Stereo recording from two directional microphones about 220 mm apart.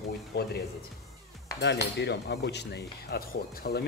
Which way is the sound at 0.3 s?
45° left (ahead or behind).